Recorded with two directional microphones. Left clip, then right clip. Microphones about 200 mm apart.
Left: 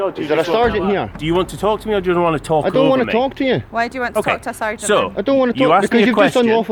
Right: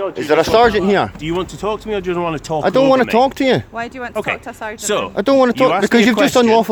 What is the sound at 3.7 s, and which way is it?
Speech, 50° left (ahead or behind).